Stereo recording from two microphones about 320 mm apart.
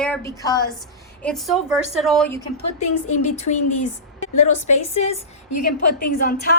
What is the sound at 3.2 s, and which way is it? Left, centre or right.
Speech, left.